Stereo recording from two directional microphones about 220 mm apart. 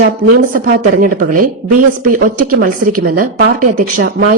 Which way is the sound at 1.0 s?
40° right (ahead or behind).